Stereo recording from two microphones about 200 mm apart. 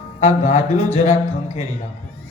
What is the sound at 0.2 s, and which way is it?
Speech, 30° left (ahead or behind).